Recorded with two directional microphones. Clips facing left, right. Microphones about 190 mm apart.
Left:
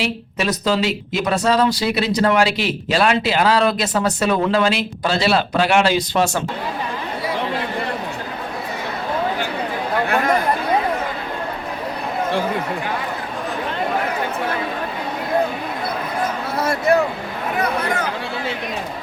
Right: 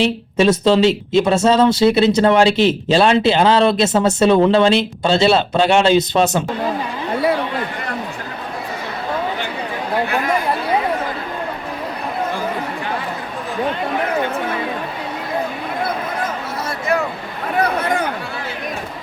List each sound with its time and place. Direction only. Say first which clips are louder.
0.0 s speech: right 7 dB; 25° right (ahead or behind)